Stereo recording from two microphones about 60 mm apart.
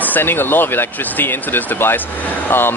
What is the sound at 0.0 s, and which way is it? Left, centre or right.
Speech, left.